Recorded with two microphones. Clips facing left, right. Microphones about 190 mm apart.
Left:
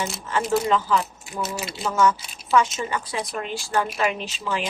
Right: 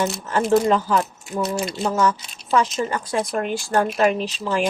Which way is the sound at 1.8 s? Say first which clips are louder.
Left 1 dB; 35° right (ahead or behind).